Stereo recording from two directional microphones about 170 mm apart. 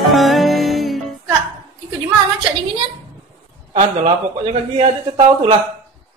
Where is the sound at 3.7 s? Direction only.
40° right (ahead or behind).